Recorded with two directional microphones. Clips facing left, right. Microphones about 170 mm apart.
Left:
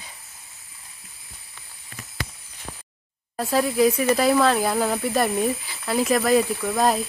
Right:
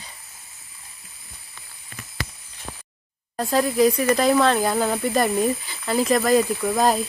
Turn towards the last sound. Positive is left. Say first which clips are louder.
# right 1 dB
turn(degrees=0)  # may be behind; listen again after turning